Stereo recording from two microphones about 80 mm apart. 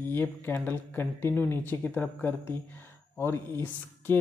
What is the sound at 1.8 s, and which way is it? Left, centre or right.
Speech, centre.